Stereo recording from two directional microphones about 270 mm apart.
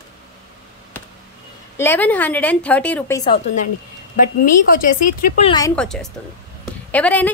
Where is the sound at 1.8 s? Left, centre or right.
Centre.